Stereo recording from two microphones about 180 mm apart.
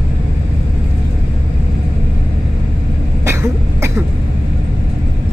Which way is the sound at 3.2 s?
15° right (ahead or behind).